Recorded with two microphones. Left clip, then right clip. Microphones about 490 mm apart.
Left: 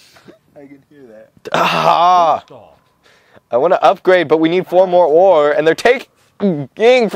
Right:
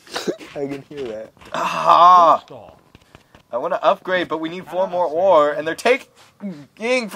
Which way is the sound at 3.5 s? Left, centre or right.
Left.